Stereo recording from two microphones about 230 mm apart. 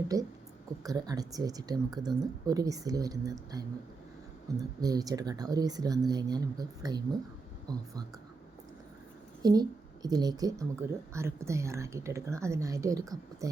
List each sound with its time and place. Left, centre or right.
0.1 s speech: centre
4.8 s speech: centre
9.4 s speech: centre